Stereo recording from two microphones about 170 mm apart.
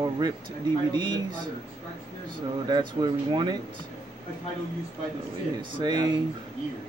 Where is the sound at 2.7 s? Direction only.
25° right (ahead or behind).